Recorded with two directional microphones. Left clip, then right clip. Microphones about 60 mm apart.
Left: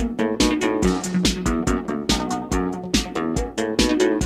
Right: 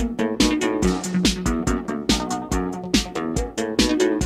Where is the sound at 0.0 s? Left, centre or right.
Centre.